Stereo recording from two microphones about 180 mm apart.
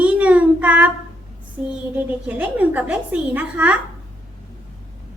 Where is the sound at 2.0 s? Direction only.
10° right (ahead or behind).